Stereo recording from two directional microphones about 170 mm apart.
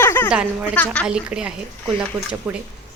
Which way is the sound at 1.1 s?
5° right (ahead or behind).